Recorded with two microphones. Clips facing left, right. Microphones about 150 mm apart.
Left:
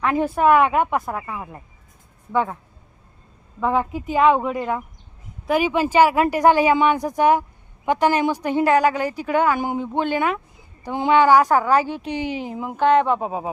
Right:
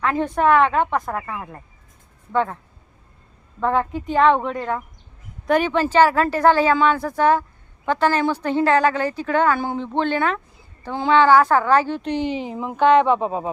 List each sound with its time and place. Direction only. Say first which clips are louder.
0.0 s a woman's voice: left 1 dB; 15° left (ahead or behind)
3.6 s a woman's voice: even; 5° left (ahead or behind)
12.7 s speech: right 2 dB; 45° left (ahead or behind)